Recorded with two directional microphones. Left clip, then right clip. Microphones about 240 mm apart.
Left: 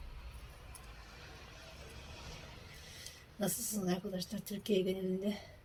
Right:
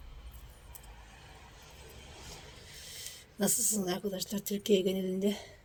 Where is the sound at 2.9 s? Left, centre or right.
Right.